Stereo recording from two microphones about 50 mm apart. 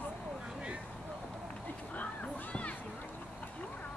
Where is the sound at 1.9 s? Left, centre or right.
Left.